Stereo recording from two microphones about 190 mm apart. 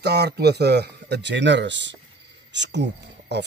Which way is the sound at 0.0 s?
60° right (ahead or behind).